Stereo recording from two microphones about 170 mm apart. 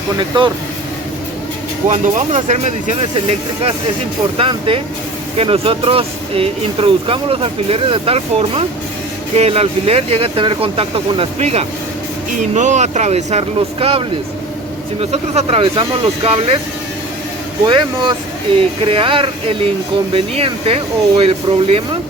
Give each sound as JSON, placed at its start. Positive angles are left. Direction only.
{"t": 1.9, "sound": "speech", "side_deg": -45}
{"t": 15.1, "sound": "speech", "side_deg": -35}
{"t": 17.7, "sound": "speech", "side_deg": -25}